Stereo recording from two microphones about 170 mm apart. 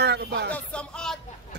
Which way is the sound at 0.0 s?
85° right.